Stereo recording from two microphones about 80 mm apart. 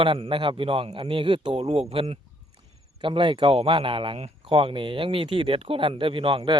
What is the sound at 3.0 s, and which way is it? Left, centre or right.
Speech, right.